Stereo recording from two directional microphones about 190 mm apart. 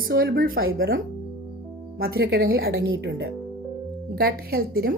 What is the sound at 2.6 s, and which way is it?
Speech, 80° right.